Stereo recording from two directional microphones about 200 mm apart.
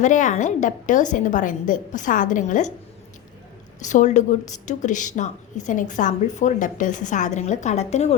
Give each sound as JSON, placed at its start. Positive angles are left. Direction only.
{"t": 0.0, "sound": "a woman's voice", "side_deg": 40}
{"t": 3.8, "sound": "a woman's voice", "side_deg": 35}